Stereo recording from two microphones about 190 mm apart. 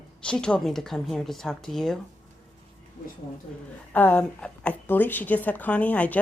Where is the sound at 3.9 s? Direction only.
10° left (ahead or behind).